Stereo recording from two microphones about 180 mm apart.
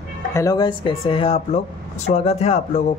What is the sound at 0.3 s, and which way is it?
A man's voice, 20° left (ahead or behind).